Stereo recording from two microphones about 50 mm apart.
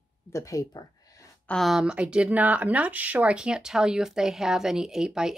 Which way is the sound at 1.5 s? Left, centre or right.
Left.